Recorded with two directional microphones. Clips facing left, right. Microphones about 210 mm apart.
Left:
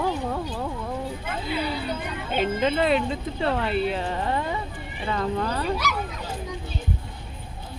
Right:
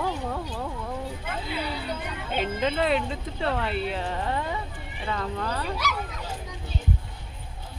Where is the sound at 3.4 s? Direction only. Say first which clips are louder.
Left 3 dB; 20° left (ahead or behind).